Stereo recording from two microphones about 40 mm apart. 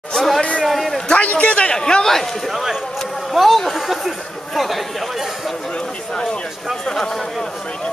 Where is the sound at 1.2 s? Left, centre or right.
Left.